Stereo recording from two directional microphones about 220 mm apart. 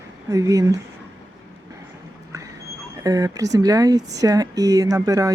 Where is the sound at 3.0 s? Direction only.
15° right (ahead or behind).